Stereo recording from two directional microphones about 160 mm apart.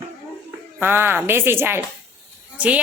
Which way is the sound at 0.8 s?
15° right (ahead or behind).